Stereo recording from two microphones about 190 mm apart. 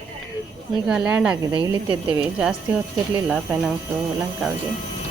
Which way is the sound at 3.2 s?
5° right (ahead or behind).